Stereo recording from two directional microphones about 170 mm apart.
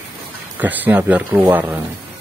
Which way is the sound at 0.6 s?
10° right (ahead or behind).